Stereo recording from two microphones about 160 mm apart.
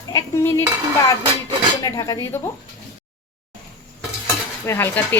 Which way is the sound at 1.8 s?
20° left (ahead or behind).